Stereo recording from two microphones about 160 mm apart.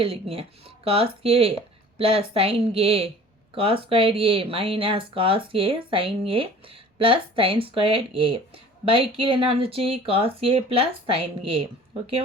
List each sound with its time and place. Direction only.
0.0 s speech: 35° right (ahead or behind)